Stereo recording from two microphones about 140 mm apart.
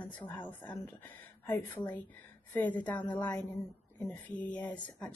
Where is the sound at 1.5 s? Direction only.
15° left (ahead or behind).